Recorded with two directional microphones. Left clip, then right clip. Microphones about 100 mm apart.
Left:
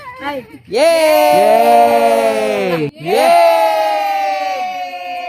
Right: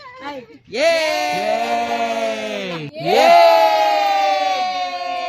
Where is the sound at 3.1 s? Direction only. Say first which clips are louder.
Left 1 dB; 25° left (ahead or behind).